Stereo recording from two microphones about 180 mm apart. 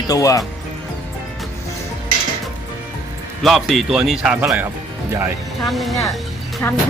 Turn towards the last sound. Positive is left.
turn(degrees=15)  # may be behind; listen again after turning